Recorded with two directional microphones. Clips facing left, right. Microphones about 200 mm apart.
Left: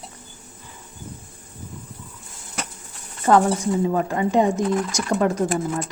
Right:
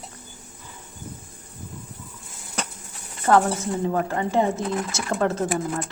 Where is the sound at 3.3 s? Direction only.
15° left (ahead or behind).